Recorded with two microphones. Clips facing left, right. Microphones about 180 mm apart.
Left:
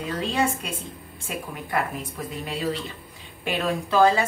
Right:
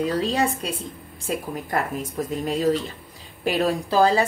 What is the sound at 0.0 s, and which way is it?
Speech, 35° right (ahead or behind).